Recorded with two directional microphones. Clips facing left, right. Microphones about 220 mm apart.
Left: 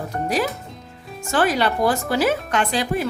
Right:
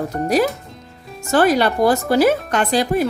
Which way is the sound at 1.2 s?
40° right (ahead or behind).